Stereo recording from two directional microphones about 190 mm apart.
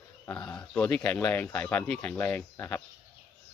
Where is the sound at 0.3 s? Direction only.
5° left (ahead or behind).